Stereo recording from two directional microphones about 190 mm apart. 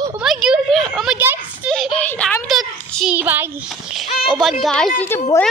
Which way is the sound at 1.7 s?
Centre (ahead or behind).